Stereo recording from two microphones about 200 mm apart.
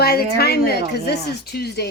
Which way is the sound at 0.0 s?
50° left (ahead or behind).